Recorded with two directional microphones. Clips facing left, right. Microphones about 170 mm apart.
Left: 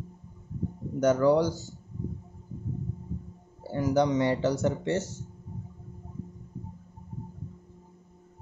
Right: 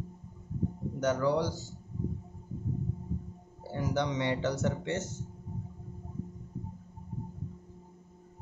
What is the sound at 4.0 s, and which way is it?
Speech, 40° left (ahead or behind).